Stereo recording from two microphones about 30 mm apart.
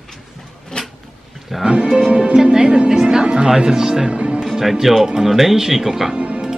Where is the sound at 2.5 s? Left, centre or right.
Right.